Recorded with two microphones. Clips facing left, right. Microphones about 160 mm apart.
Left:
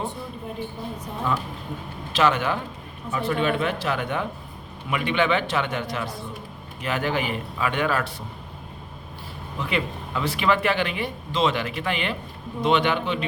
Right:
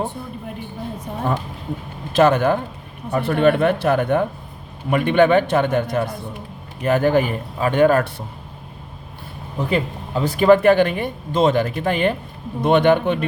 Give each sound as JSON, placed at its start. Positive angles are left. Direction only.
{"t": 2.1, "sound": "speech", "side_deg": -50}
{"t": 9.6, "sound": "speech", "side_deg": -40}